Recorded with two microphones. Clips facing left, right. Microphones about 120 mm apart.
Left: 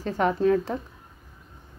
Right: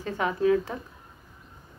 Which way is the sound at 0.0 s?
35° left (ahead or behind).